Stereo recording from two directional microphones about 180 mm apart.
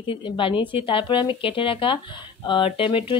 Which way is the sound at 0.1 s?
30° left (ahead or behind).